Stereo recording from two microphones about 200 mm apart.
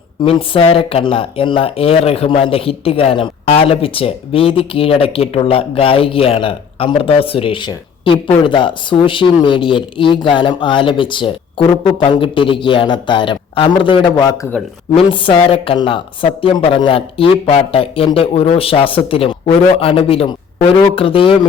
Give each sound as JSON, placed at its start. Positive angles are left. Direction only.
{"t": 0.2, "sound": "speech", "side_deg": 25}